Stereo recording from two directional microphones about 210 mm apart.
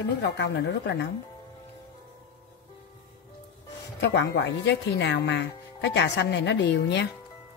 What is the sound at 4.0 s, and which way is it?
Speech, 55° left (ahead or behind).